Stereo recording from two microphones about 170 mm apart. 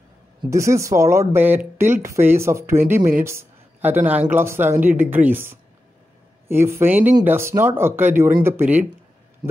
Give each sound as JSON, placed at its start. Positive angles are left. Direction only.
{"t": 0.5, "sound": "speech", "side_deg": -15}